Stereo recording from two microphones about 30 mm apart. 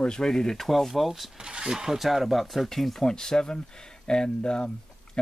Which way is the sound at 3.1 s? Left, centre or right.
Left.